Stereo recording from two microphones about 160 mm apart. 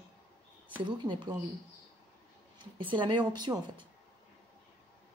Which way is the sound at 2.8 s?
30° right (ahead or behind).